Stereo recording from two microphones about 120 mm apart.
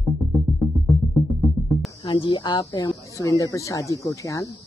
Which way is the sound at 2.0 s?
40° left (ahead or behind).